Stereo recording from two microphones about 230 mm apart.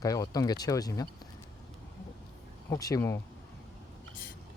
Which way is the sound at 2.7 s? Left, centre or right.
Centre.